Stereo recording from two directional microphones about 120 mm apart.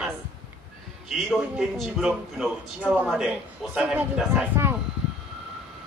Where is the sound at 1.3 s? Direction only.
Centre (ahead or behind).